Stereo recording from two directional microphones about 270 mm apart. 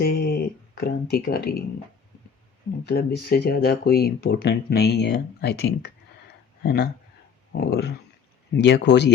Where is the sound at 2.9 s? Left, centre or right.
Left.